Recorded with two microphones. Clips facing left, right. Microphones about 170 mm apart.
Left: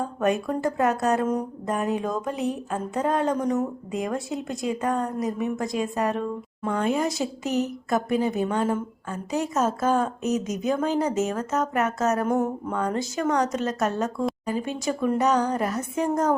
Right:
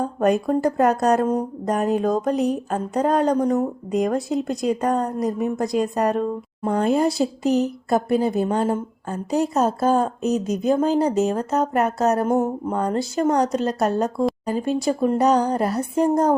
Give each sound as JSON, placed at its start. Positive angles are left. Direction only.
{"t": 0.0, "sound": "speech", "side_deg": -35}